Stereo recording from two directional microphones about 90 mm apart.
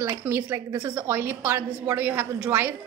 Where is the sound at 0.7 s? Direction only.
45° right (ahead or behind).